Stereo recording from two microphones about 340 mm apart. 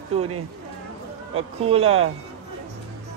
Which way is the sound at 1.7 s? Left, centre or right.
Centre.